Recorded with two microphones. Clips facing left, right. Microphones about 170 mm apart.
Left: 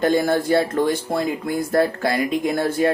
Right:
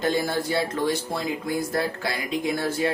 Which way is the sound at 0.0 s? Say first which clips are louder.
Left 6 dB; 50° left (ahead or behind).